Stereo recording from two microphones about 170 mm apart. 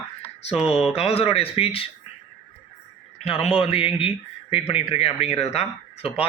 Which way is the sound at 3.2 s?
35° left (ahead or behind).